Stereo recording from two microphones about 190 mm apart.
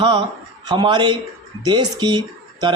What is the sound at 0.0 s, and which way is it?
Speech, 25° right (ahead or behind).